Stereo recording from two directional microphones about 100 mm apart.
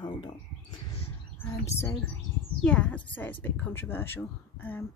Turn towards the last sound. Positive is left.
turn(degrees=20)  # may be behind; listen again after turning